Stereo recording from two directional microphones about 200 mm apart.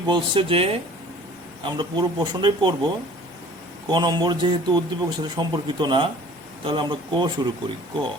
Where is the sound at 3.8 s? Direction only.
20° right (ahead or behind).